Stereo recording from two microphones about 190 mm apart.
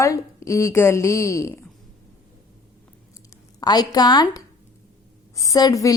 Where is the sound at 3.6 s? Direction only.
20° left (ahead or behind).